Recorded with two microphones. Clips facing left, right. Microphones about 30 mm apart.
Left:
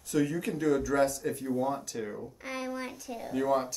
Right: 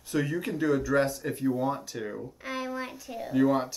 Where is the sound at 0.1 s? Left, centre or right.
Centre.